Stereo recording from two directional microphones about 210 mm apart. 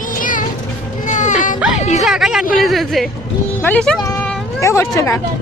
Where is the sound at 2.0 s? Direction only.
Centre (ahead or behind).